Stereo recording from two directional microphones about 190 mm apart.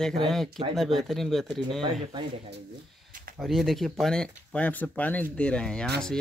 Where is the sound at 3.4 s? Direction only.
Centre (ahead or behind).